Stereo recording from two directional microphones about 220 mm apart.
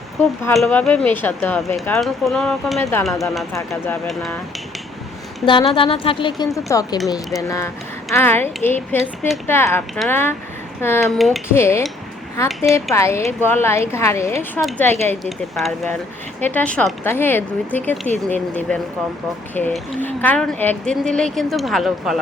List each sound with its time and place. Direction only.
0.5 s speech: 5° left (ahead or behind)
2.8 s speech: 15° left (ahead or behind)
3.7 s speech: centre (ahead or behind)
5.5 s a woman's voice: 25° left (ahead or behind); by 11.4 s centre (ahead or behind)
11.4 s speech: 10° left (ahead or behind)
12.5 s speech: centre (ahead or behind)
12.7 s speech: 15° left (ahead or behind)